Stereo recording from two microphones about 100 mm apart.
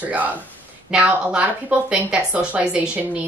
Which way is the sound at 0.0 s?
15° right (ahead or behind).